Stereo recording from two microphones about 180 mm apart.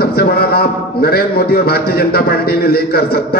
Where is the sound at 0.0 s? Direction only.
60° left (ahead or behind).